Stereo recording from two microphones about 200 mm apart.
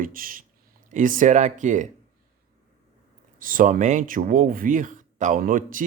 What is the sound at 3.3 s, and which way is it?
Speech, 45° right (ahead or behind).